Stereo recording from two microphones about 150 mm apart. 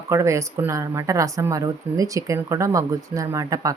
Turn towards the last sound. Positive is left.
turn(degrees=-20)  # may be behind; listen again after turning